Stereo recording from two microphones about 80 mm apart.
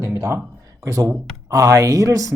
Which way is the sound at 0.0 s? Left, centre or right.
Right.